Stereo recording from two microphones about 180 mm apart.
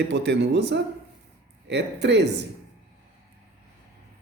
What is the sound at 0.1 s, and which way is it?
Speech, 70° right (ahead or behind).